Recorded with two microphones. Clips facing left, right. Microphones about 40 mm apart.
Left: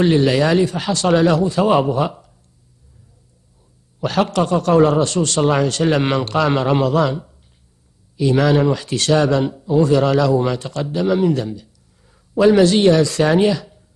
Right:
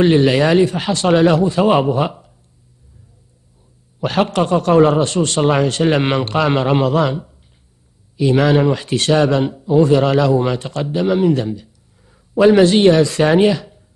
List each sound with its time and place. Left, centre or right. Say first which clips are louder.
0.0 s a man's voice: right 2 dB; right
4.0 s a man's voice: right 1 dB; right